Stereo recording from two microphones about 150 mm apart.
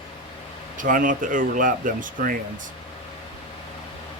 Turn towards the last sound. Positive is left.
turn(degrees=-65)  # may be behind; listen again after turning